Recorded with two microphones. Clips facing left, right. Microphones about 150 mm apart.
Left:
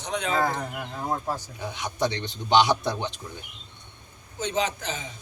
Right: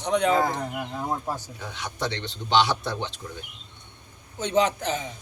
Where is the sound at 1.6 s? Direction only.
15° left (ahead or behind).